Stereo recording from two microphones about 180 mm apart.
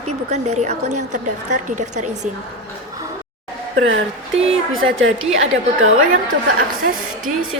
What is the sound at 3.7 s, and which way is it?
A woman's voice, 90° right.